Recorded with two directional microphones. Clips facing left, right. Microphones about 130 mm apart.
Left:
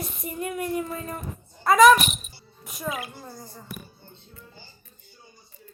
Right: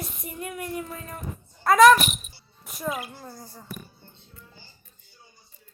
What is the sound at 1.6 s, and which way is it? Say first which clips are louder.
Speech: even; centre (ahead or behind).